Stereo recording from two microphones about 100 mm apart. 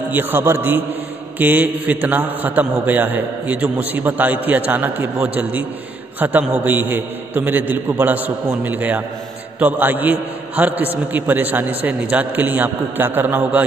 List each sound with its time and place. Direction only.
0.1 s a man's voice: 20° right (ahead or behind)